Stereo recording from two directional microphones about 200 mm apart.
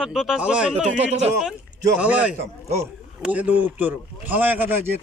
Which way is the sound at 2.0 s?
5° right (ahead or behind).